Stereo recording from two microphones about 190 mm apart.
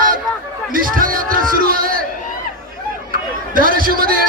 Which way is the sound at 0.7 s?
45° right (ahead or behind).